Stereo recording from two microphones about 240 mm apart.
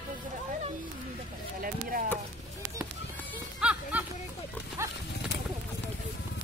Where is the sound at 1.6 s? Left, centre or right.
Right.